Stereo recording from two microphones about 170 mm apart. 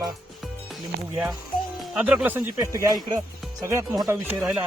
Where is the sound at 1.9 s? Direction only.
5° right (ahead or behind).